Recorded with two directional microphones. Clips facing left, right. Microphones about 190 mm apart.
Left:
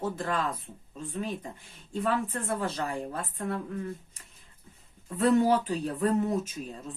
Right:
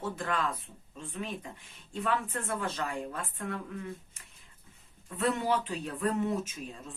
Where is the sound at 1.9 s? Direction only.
35° left (ahead or behind).